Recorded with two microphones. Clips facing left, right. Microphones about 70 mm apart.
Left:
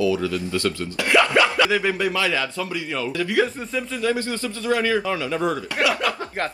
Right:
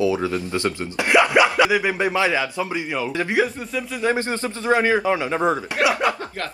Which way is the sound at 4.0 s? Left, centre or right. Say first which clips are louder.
Right 3 dB; right.